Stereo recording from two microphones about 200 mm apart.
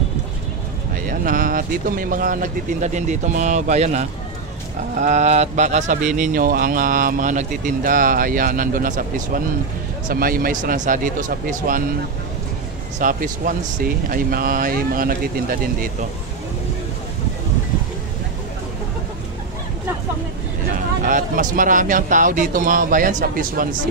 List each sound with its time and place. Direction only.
1.0 s speech: 45° right (ahead or behind)
13.0 s speech: 45° right (ahead or behind)
21.0 s speech: 40° right (ahead or behind)